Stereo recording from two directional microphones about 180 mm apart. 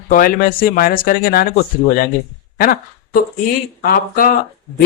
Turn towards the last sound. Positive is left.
turn(degrees=55)  # may be behind; listen again after turning